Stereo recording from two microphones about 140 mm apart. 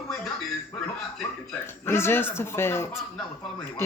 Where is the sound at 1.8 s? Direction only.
15° left (ahead or behind).